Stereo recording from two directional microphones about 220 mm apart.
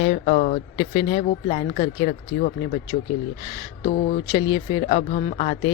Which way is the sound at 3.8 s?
35° left (ahead or behind).